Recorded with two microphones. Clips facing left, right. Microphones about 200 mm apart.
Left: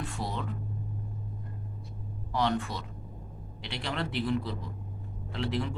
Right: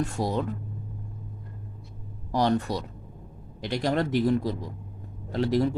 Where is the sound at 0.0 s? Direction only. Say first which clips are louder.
Right 8 dB; 45° right (ahead or behind).